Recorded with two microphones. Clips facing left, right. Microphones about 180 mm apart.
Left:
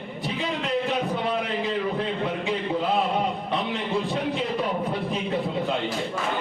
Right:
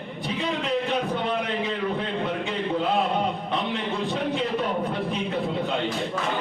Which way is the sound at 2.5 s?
Centre (ahead or behind).